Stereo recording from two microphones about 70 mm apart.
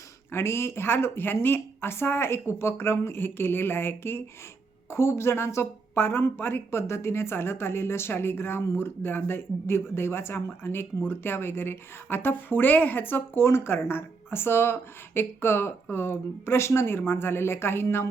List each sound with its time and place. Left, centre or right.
0.3 s speech: left